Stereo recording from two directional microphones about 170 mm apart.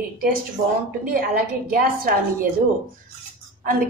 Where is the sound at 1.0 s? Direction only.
60° right (ahead or behind).